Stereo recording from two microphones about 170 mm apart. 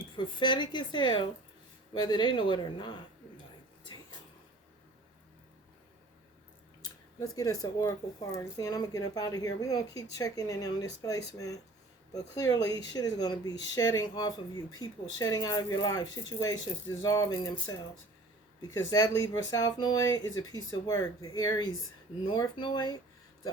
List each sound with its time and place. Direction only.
0.2 s speech: 30° left (ahead or behind)
6.8 s speech: 20° left (ahead or behind)